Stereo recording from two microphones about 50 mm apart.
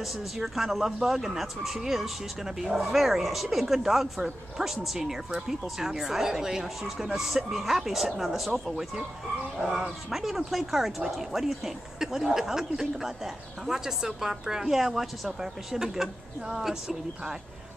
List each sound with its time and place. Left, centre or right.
0.0 s speech: centre